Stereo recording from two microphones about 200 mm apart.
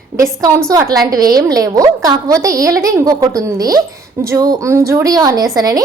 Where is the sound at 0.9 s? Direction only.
20° right (ahead or behind).